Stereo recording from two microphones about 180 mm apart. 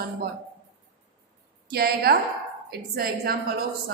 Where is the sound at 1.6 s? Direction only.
55° right (ahead or behind).